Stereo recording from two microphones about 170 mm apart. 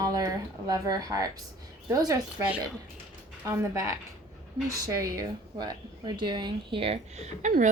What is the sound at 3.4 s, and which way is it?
A woman's voice, 15° right (ahead or behind).